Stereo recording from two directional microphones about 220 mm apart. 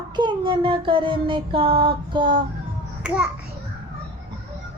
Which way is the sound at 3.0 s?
5° right (ahead or behind).